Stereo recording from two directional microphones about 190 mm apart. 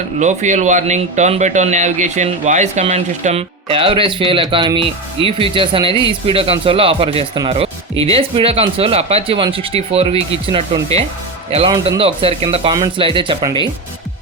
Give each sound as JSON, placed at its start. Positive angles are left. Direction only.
{"t": 0.2, "sound": "speech", "side_deg": -40}